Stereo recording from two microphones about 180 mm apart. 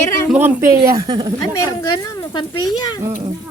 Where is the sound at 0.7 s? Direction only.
55° right (ahead or behind).